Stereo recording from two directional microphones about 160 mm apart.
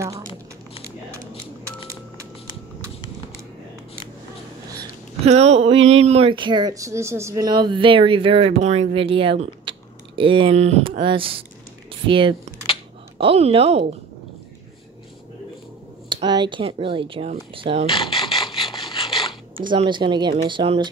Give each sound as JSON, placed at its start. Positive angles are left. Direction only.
{"t": 5.2, "sound": "speech", "side_deg": -40}
{"t": 16.1, "sound": "speech", "side_deg": -30}
{"t": 17.8, "sound": "mechanisms", "side_deg": 35}
{"t": 19.9, "sound": "speech", "side_deg": -30}